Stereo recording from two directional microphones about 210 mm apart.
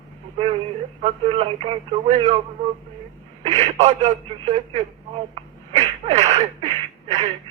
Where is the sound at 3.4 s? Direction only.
30° right (ahead or behind).